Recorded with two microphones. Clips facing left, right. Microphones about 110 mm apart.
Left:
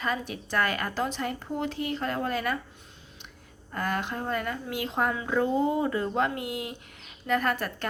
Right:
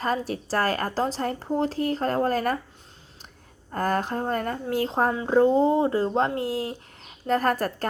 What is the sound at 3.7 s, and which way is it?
A woman's voice, 40° right (ahead or behind).